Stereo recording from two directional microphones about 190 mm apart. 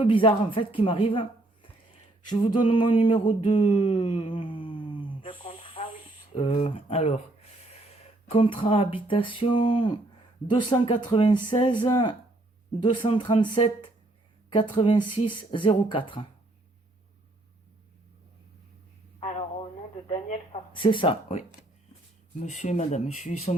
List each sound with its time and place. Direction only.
0.0 s speech: 25° left (ahead or behind)
2.3 s speech: 25° left (ahead or behind)
2.7 s a sound: 25° left (ahead or behind)
6.3 s speech: 30° left (ahead or behind)
19.2 s radio: 30° left (ahead or behind)
20.1 s speech: 35° left (ahead or behind)